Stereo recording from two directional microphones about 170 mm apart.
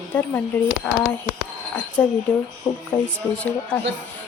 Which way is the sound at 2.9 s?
25° left (ahead or behind).